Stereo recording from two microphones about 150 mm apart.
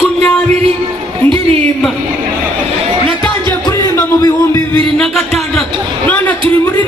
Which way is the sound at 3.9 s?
15° left (ahead or behind).